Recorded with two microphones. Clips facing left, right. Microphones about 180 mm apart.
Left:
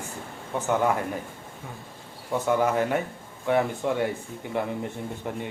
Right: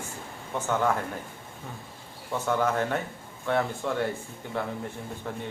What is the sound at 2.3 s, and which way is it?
Speech, 10° left (ahead or behind).